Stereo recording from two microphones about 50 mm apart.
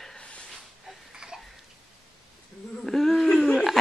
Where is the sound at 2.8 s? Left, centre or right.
Centre.